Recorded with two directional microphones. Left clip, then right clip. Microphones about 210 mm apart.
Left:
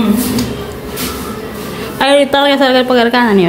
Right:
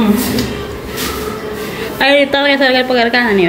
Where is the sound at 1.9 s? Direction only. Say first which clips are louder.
Left 1 dB; 10° left (ahead or behind).